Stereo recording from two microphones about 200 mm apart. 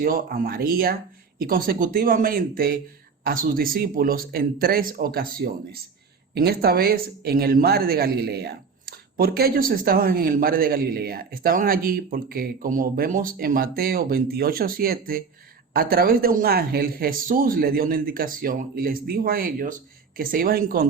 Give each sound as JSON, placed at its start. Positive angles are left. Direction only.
{"t": 0.0, "sound": "speech", "side_deg": -45}